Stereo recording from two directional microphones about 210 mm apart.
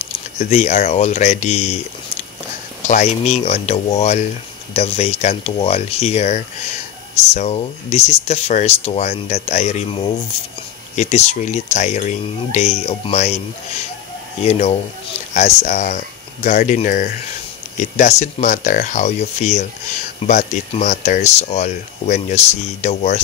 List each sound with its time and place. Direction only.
0.0 s speech: 35° left (ahead or behind)
2.9 s speech: 35° left (ahead or behind)
14.4 s speech: 30° left (ahead or behind)